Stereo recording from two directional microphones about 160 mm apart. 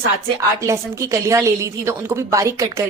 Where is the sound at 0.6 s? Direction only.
20° right (ahead or behind).